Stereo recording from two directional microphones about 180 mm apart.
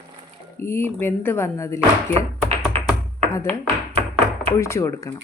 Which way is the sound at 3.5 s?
35° right (ahead or behind).